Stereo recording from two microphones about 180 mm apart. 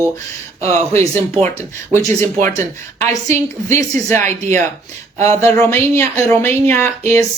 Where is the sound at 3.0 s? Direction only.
15° left (ahead or behind).